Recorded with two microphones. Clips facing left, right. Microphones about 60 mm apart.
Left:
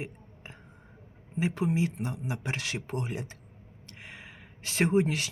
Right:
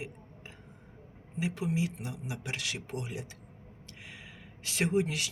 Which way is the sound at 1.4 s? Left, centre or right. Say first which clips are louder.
Left 4 dB; left.